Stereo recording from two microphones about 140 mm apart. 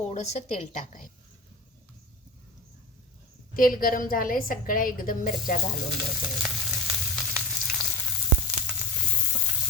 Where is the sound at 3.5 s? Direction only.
90° left.